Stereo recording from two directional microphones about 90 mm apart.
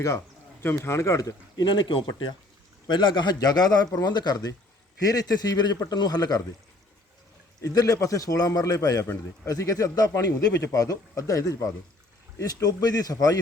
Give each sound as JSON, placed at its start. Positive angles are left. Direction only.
{"t": 0.9, "sound": "a man's voice", "side_deg": 35}
{"t": 7.6, "sound": "a man's voice", "side_deg": 45}